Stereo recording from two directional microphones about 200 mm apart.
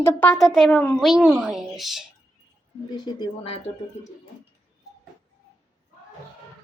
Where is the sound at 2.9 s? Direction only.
20° left (ahead or behind).